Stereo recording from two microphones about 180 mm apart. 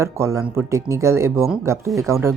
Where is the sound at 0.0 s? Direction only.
15° right (ahead or behind).